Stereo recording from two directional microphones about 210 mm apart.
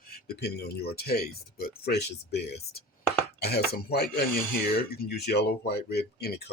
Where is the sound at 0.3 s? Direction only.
50° left (ahead or behind).